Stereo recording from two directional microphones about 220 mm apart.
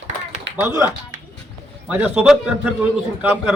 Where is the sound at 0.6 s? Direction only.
10° right (ahead or behind).